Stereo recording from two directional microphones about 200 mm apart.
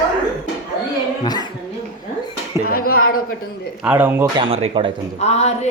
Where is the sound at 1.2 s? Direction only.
20° left (ahead or behind).